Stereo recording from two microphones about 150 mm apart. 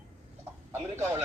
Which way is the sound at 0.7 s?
15° right (ahead or behind).